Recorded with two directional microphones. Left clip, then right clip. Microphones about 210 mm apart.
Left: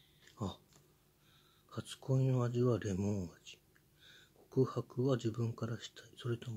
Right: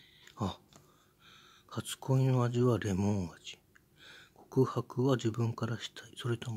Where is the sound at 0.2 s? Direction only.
25° right (ahead or behind).